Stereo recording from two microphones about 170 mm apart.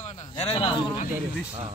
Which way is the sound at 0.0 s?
35° left (ahead or behind).